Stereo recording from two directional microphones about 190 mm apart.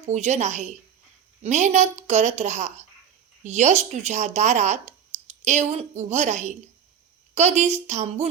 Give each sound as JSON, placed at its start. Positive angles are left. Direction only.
{"t": 0.1, "sound": "speech", "side_deg": -35}